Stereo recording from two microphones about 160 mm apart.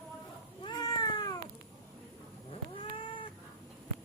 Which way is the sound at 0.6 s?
25° left (ahead or behind).